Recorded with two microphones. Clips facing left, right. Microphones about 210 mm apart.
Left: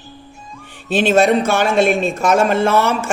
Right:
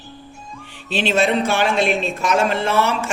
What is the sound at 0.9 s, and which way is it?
Speech, 50° left (ahead or behind).